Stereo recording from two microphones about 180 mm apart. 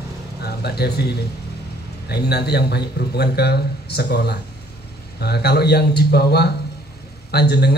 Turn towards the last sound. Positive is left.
turn(degrees=65)  # may be behind; listen again after turning